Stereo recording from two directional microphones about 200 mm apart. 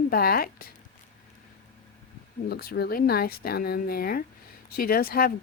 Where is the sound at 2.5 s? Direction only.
50° left (ahead or behind).